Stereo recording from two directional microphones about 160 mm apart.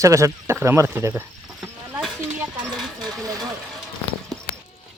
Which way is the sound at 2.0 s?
5° right (ahead or behind).